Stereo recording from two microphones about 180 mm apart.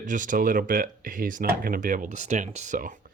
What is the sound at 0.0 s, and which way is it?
Speech, 45° right (ahead or behind).